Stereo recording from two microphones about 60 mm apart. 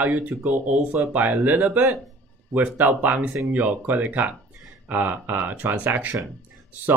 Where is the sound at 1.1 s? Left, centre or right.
Right.